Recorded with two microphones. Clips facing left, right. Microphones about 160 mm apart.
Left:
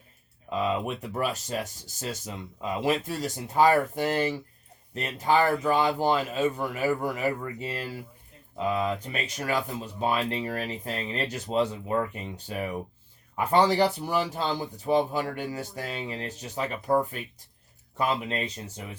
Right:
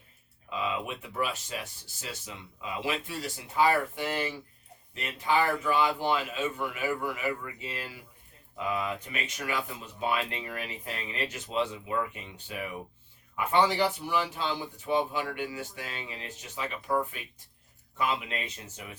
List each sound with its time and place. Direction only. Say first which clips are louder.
0.5 s speech: left 5 dB; 40° left (ahead or behind)